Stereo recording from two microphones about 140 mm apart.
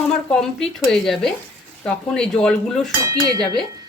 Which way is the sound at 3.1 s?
30° right (ahead or behind).